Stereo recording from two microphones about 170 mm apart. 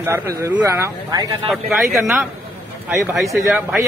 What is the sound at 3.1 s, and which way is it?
Speech, centre (ahead or behind).